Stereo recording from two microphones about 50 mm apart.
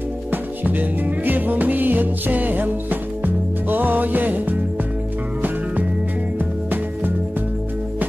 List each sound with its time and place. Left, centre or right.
0.3 s music: right
6.3 s music: right